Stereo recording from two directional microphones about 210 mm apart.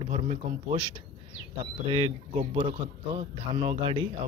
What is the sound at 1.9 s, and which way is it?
A man's voice, 25° right (ahead or behind).